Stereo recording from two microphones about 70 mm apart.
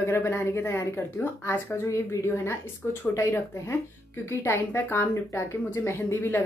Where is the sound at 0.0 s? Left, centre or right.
Left.